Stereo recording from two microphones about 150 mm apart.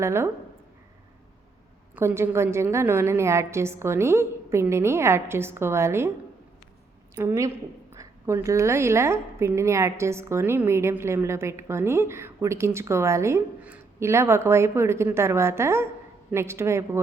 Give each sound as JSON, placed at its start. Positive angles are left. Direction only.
{"t": 0.0, "sound": "a woman's voice", "side_deg": -15}
{"t": 2.0, "sound": "a woman's voice", "side_deg": -15}
{"t": 7.2, "sound": "a woman's voice", "side_deg": -20}